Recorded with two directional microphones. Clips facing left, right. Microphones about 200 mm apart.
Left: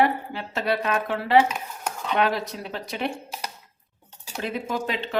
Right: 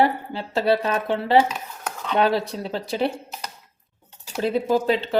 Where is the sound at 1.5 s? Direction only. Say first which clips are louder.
Even; 10° left (ahead or behind).